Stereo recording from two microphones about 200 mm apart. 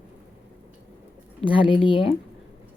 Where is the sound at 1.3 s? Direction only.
25° left (ahead or behind).